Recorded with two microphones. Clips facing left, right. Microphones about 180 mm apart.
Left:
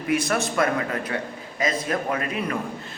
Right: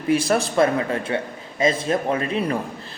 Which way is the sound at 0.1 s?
30° right (ahead or behind).